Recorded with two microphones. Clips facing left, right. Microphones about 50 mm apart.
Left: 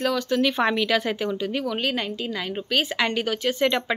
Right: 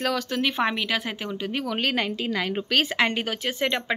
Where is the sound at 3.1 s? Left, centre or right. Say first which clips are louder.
Left 3 dB; right.